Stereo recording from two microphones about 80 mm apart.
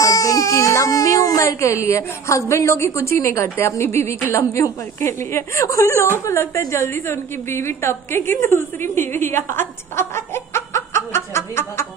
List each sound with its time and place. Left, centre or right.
0.0 s a woman's voice: left